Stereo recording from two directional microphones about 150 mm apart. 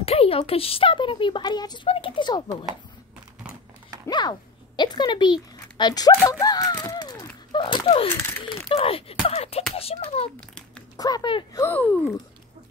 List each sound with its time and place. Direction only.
0.0 s speech: 40° left (ahead or behind)
4.1 s speech: 30° left (ahead or behind)
6.8 s a sound: 25° left (ahead or behind)
7.5 s speech: 35° left (ahead or behind)
8.1 s a child's voice: 15° left (ahead or behind)
8.7 s speech: 40° left (ahead or behind)
11.0 s speech: 25° left (ahead or behind)
11.5 s a child's voice: 15° left (ahead or behind)